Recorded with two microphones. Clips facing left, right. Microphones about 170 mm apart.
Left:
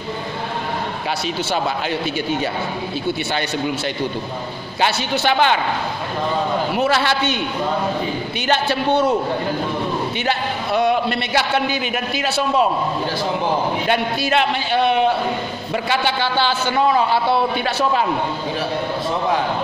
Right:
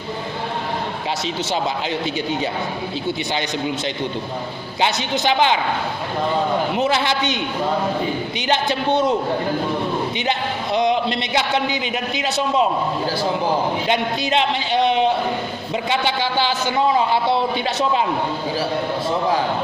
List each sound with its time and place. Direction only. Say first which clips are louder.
4.7 s a man's voice: left 1 dB; 20° right (ahead or behind)
6.7 s a man's voice: left 1 dB; 20° right (ahead or behind)
10.1 s a man's voice: left 1 dB; 20° right (ahead or behind)
13.8 s a man's voice: left 1 dB; 20° right (ahead or behind)